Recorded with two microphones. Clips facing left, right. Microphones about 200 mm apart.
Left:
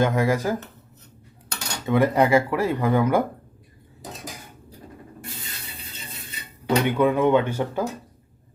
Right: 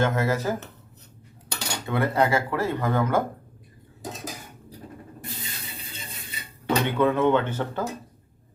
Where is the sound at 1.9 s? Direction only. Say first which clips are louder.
Left 5 dB; 15° left (ahead or behind).